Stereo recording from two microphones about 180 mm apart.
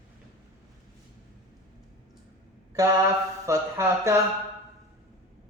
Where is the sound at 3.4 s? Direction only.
15° right (ahead or behind).